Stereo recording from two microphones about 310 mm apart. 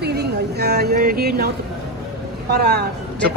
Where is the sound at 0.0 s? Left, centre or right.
Right.